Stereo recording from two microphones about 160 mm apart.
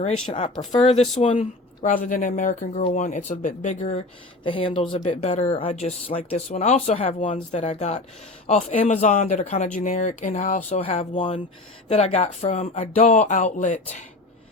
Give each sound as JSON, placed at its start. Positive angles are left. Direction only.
{"t": 0.0, "sound": "speech", "side_deg": 40}
{"t": 4.4, "sound": "speech", "side_deg": 35}
{"t": 4.9, "sound": "speech", "side_deg": 45}
{"t": 10.8, "sound": "speech", "side_deg": 40}